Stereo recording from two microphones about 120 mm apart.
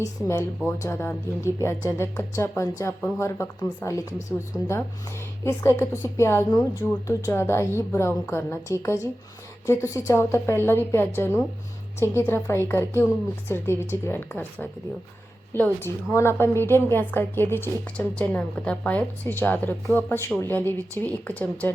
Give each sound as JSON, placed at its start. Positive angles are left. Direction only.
{"t": 0.0, "sound": "a woman's voice", "side_deg": 25}